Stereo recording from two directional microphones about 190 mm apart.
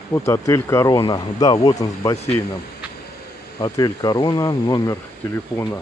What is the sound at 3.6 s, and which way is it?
Speech, 20° left (ahead or behind).